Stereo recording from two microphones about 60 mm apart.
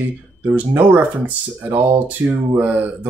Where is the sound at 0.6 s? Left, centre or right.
Right.